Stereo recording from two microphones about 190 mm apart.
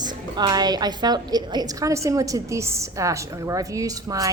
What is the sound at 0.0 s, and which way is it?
A woman's voice, 20° right (ahead or behind).